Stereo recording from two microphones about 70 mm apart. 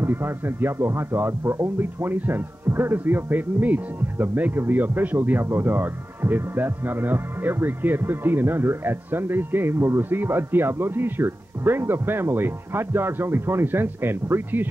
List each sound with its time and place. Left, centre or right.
0.0 s speech: right